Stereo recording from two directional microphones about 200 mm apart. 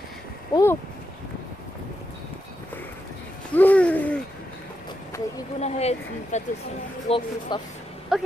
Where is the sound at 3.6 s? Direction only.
5° left (ahead or behind).